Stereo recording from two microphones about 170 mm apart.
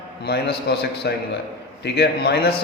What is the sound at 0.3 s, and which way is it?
A man's voice, 75° left (ahead or behind).